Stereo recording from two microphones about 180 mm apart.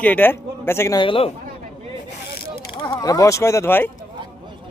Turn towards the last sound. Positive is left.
turn(degrees=15)  # may be behind; listen again after turning